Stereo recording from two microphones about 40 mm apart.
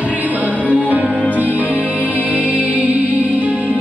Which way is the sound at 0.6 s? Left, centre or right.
Right.